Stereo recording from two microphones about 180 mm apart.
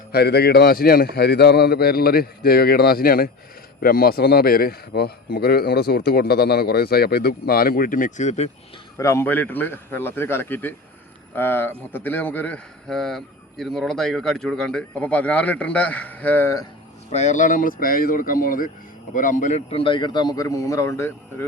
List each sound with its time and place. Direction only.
0.1 s a man's voice: 65° left (ahead or behind); by 8.4 s 40° left (ahead or behind)
9.0 s a man's voice: 15° left (ahead or behind)
17.1 s a man's voice: 40° left (ahead or behind); by 21.4 s 15° left (ahead or behind)